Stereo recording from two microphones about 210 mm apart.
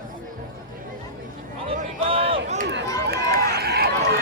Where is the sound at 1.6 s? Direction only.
25° right (ahead or behind).